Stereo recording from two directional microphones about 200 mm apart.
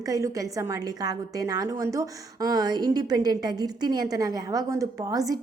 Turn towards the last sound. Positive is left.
turn(degrees=-15)  # may be behind; listen again after turning